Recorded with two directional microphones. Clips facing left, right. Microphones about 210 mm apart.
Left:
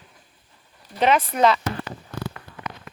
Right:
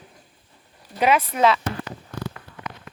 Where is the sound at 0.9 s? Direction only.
5° right (ahead or behind).